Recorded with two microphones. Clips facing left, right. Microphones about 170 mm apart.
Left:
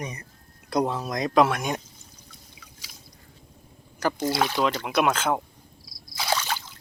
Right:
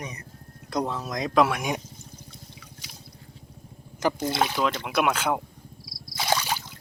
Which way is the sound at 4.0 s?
20° right (ahead or behind).